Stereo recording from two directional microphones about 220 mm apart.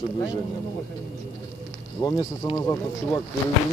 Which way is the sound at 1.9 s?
15° left (ahead or behind).